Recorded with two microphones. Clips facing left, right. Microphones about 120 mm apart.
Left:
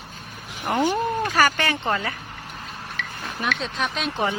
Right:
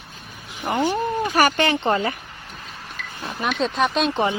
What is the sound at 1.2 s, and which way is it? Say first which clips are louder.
Speech: right 4 dB; 20° right (ahead or behind).